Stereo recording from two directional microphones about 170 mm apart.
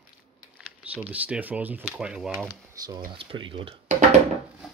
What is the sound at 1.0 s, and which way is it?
Speech, 10° right (ahead or behind).